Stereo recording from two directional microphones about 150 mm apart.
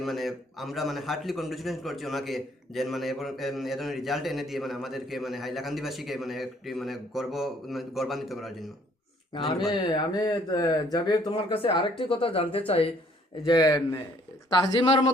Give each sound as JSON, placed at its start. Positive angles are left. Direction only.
{"t": 0.0, "sound": "a man's voice", "side_deg": 0}
{"t": 9.6, "sound": "speech", "side_deg": 30}
{"t": 13.4, "sound": "speech", "side_deg": 30}